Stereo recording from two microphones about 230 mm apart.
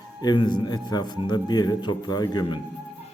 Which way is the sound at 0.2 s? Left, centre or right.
Centre.